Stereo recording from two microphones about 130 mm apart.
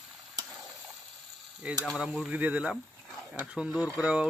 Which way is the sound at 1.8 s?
5° right (ahead or behind).